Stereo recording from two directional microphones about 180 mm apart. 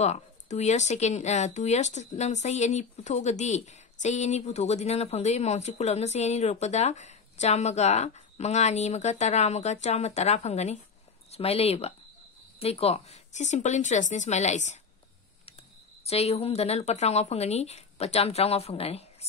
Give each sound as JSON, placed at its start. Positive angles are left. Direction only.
{"t": 0.0, "sound": "speech", "side_deg": 40}
{"t": 16.1, "sound": "speech", "side_deg": 35}